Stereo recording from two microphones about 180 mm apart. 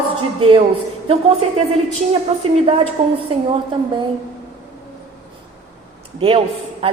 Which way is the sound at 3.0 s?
30° right (ahead or behind).